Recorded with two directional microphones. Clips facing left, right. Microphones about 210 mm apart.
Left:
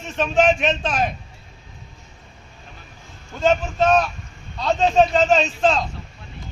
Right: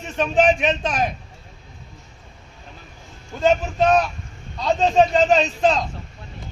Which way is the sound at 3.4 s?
10° right (ahead or behind).